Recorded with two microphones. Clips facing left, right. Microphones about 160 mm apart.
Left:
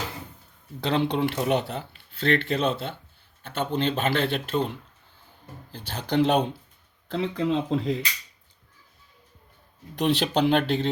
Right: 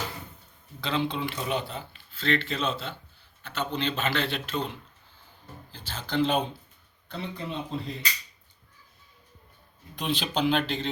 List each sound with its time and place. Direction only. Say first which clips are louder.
0.8 s speech: left 5 dB; 60° left (ahead or behind)
5.7 s speech: left 5 dB; 60° left (ahead or behind)
7.1 s speech: left 10 dB; 90° left
9.9 s speech: left 6 dB; 70° left (ahead or behind)